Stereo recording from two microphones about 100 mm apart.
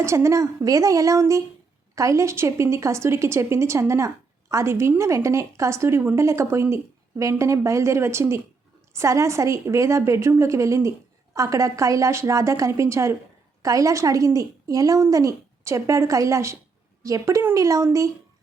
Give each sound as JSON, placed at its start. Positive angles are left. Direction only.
{"t": 0.0, "sound": "a woman's voice", "side_deg": -30}